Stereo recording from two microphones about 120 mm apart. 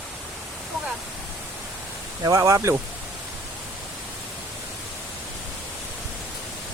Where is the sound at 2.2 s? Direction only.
25° right (ahead or behind).